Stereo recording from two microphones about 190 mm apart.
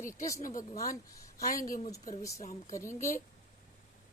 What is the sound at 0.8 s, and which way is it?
A woman's voice, 15° left (ahead or behind).